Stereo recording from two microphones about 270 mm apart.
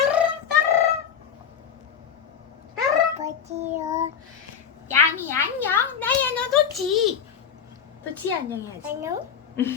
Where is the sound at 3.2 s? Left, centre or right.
Right.